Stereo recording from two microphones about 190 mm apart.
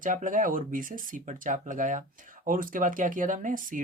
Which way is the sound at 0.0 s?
45° right (ahead or behind).